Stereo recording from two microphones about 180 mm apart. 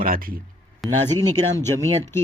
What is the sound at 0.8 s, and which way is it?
Speech, 20° right (ahead or behind).